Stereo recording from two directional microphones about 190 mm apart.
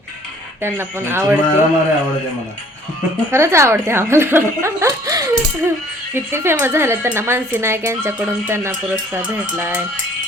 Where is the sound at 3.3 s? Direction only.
15° right (ahead or behind).